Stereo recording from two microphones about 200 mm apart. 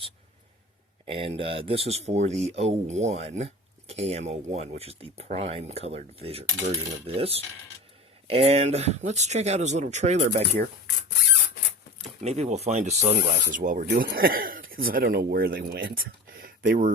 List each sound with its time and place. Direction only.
1.0 s speech: 25° right (ahead or behind)
6.7 s coin: 30° right (ahead or behind)
8.3 s speech: 30° right (ahead or behind)
12.0 s speech: 30° right (ahead or behind)
13.9 s speech: 50° right (ahead or behind)
16.0 s a sound: 50° right (ahead or behind)